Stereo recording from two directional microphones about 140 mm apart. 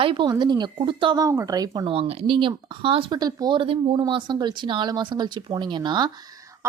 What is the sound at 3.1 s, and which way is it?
Speech, 30° right (ahead or behind).